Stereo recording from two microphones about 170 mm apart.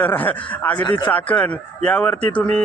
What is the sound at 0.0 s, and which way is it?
Speech, 10° left (ahead or behind).